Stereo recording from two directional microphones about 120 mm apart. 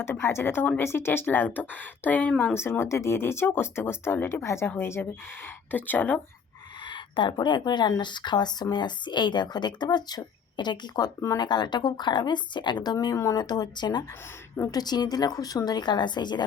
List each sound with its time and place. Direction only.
0.0 s a woman's voice: 20° left (ahead or behind)
6.8 s speech: 40° left (ahead or behind)